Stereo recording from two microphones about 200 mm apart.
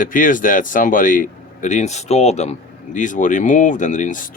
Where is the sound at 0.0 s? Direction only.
40° left (ahead or behind).